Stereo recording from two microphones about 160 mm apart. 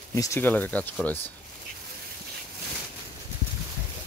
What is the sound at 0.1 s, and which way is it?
Speech, 20° left (ahead or behind).